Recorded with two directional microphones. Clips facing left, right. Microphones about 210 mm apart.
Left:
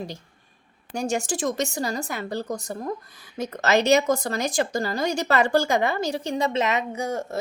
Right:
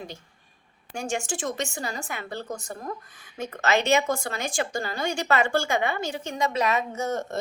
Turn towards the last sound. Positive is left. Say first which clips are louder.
# left 1 dB
turn(degrees=10)  # may be behind; listen again after turning